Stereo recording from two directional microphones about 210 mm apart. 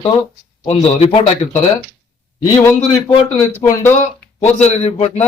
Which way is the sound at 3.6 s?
15° left (ahead or behind).